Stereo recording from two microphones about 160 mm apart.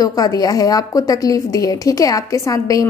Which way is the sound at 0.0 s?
20° left (ahead or behind).